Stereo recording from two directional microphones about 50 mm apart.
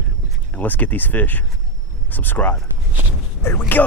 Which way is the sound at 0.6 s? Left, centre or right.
Left.